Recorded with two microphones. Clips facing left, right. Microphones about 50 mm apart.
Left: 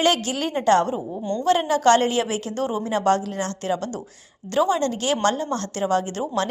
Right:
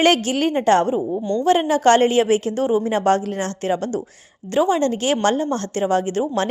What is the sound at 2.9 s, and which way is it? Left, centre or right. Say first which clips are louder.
A woman's voice: right 2 dB; right.